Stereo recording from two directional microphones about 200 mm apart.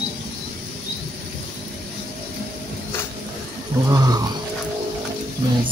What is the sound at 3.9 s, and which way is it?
Roaring cats, 20° right (ahead or behind).